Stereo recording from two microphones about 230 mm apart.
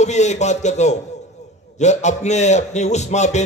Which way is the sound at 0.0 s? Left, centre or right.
Left.